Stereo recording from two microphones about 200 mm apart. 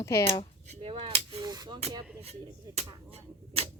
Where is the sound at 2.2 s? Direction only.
30° right (ahead or behind).